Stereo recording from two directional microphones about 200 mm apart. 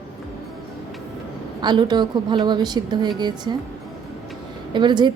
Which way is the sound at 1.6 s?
20° right (ahead or behind).